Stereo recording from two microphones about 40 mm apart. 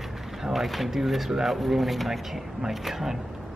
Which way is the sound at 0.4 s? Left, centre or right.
Centre.